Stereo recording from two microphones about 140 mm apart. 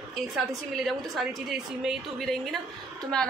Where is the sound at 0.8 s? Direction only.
Centre (ahead or behind).